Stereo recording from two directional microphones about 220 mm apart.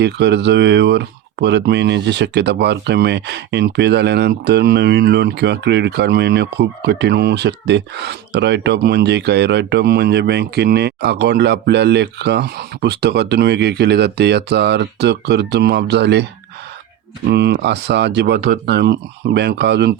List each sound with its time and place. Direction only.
0.0 s speech: 50° right (ahead or behind)
17.2 s speech: 50° right (ahead or behind)